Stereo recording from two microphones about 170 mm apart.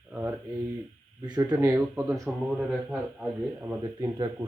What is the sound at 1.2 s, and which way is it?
Speech, 25° right (ahead or behind).